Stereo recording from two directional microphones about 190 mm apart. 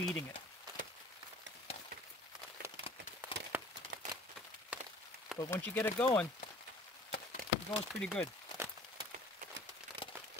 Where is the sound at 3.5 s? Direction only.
10° right (ahead or behind).